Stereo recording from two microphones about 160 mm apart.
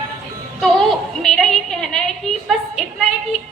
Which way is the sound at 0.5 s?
Centre (ahead or behind).